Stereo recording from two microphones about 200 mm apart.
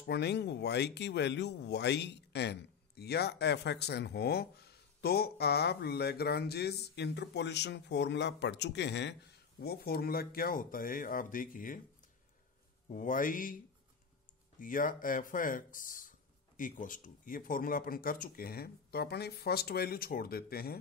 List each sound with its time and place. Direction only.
0.0 s speech: 55° left (ahead or behind)
12.8 s speech: 40° left (ahead or behind)
14.6 s speech: 45° left (ahead or behind)